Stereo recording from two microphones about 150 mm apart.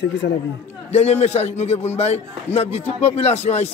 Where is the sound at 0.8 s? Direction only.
45° left (ahead or behind).